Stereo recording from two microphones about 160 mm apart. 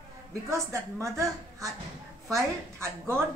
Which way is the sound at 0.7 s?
15° right (ahead or behind).